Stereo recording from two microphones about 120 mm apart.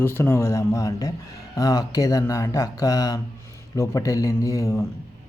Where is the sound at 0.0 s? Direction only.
20° left (ahead or behind).